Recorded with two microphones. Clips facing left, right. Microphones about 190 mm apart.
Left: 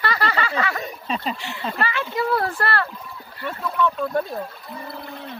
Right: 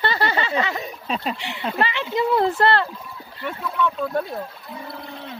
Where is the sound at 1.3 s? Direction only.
20° right (ahead or behind).